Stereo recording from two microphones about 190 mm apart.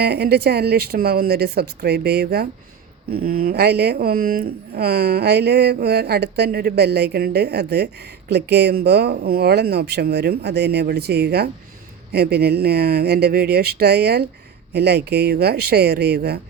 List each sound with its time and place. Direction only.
0.0 s speech: 55° right (ahead or behind)